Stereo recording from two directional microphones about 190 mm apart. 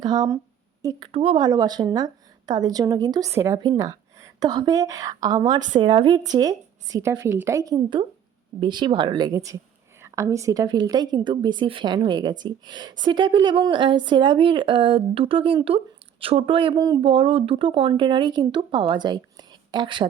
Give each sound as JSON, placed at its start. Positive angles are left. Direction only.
{"t": 0.0, "sound": "a woman's voice", "side_deg": -20}